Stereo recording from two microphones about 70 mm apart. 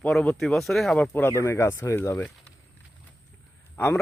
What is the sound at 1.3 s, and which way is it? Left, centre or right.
Speech, left.